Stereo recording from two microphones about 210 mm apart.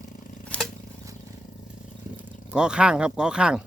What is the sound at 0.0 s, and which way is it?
Scissors, 40° left (ahead or behind).